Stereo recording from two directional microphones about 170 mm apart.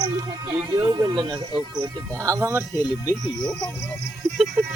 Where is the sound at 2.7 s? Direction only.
25° left (ahead or behind).